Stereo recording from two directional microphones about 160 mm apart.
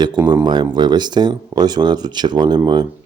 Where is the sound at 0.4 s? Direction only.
25° right (ahead or behind).